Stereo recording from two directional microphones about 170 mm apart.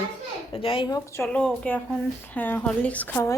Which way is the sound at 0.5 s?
30° left (ahead or behind).